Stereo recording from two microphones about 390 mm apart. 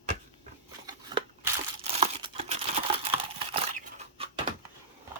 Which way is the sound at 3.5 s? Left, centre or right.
Centre.